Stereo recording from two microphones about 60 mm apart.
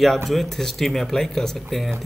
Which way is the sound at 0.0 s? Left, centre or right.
Centre.